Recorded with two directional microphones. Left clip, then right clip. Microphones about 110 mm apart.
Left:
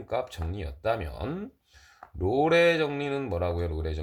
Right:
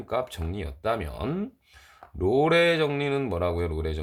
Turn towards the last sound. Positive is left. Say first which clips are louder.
# right 3 dB
turn(degrees=-35)  # may be behind; listen again after turning